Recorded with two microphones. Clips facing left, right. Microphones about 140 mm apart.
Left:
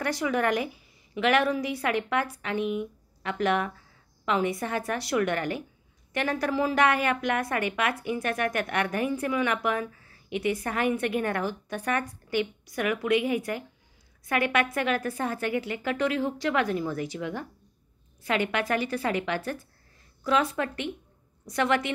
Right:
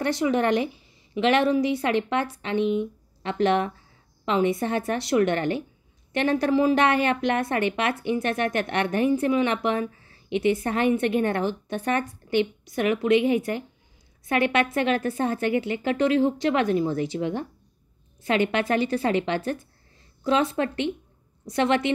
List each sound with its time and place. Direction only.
0.0 s a woman's voice: 25° right (ahead or behind)